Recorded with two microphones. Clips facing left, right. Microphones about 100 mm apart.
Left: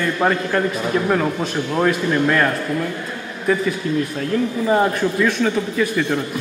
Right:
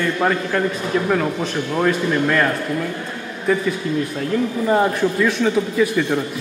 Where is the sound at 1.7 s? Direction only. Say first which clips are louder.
Even; 5° left (ahead or behind).